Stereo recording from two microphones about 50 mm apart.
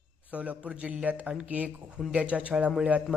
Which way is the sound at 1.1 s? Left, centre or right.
Right.